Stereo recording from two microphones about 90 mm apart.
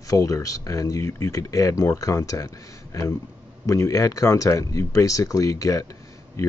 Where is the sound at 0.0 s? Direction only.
40° left (ahead or behind).